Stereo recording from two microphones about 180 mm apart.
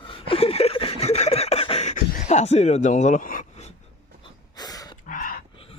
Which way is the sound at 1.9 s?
40° left (ahead or behind).